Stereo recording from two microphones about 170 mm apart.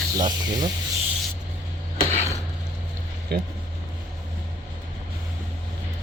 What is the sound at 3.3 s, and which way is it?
Speech, 65° right (ahead or behind).